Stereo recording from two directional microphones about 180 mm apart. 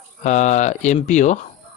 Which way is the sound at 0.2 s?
40° left (ahead or behind).